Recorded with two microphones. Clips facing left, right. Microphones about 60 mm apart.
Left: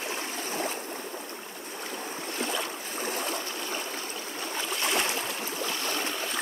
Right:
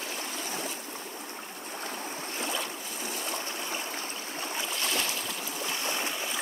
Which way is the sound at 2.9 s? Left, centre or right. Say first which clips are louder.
Left 6 dB; left.